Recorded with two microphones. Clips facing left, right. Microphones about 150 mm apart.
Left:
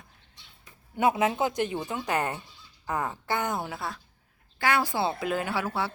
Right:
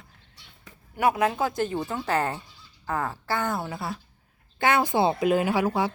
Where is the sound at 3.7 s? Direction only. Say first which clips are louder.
Right 2 dB; centre (ahead or behind).